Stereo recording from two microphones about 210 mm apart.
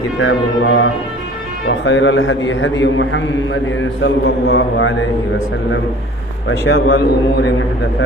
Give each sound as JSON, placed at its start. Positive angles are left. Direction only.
{"t": 0.2, "sound": "music", "side_deg": 70}
{"t": 1.6, "sound": "a man's voice", "side_deg": 60}
{"t": 6.5, "sound": "a man's voice", "side_deg": 60}